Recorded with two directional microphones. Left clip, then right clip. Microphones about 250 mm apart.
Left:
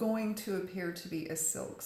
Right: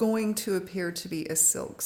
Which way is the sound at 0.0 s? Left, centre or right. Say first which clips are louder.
Right 7 dB; right.